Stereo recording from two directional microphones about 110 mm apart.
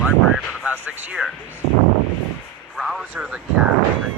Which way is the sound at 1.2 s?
5° right (ahead or behind).